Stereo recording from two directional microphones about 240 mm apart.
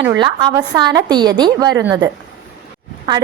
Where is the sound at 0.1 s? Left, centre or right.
Centre.